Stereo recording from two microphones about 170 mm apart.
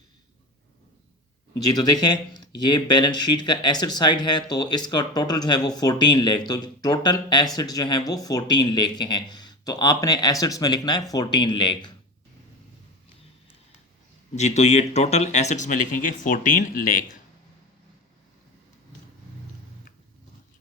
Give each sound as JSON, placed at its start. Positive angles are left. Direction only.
{"t": 1.5, "sound": "speech", "side_deg": 20}
{"t": 14.3, "sound": "speech", "side_deg": 40}